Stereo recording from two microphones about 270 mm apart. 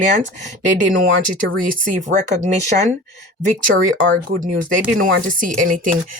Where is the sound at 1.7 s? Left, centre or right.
Right.